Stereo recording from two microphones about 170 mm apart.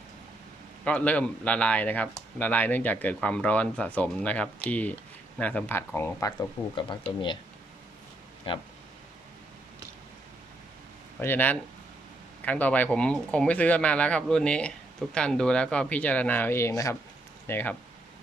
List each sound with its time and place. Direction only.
0.9 s speech: 10° left (ahead or behind)
6.7 s speech: 25° left (ahead or behind)
8.5 s speech: 30° left (ahead or behind)
11.2 s speech: 10° left (ahead or behind)